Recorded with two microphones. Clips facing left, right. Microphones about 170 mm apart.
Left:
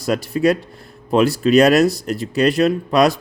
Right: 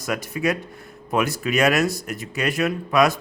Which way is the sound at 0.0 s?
35° left (ahead or behind).